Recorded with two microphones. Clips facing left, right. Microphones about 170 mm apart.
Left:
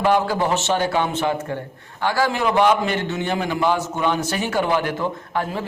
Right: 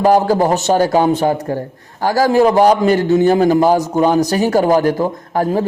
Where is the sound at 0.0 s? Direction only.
40° right (ahead or behind).